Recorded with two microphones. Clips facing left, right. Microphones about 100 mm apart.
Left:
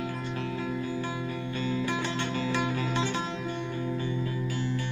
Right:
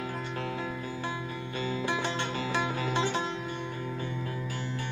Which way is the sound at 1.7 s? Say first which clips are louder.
Even; 30° right (ahead or behind).